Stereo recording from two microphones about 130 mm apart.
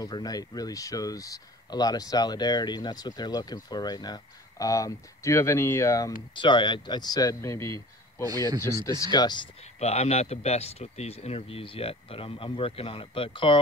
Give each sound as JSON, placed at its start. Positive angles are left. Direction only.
{"t": 0.0, "sound": "speech", "side_deg": 30}
{"t": 6.3, "sound": "speech", "side_deg": 35}
{"t": 8.2, "sound": "speech", "side_deg": -30}
{"t": 9.1, "sound": "speech", "side_deg": 35}
{"t": 9.8, "sound": "speech", "side_deg": 55}